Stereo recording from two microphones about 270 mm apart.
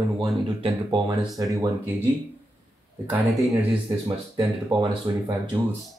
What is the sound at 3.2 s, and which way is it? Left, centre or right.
Speech, centre.